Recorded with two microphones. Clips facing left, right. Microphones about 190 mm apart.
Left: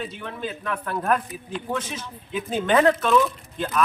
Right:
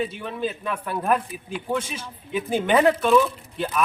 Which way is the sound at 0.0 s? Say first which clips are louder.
Right 4 dB; 10° right (ahead or behind).